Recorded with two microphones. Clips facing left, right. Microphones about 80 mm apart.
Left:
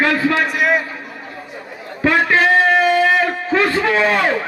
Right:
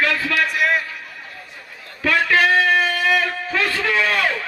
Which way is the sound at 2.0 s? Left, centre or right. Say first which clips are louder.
Left 3 dB; left.